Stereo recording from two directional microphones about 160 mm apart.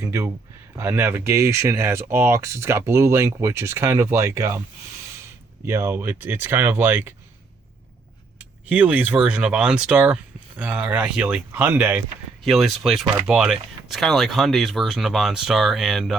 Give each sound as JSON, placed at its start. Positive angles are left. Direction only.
{"t": 0.0, "sound": "speech", "side_deg": -15}
{"t": 5.6, "sound": "speech", "side_deg": -15}
{"t": 8.7, "sound": "speech", "side_deg": -10}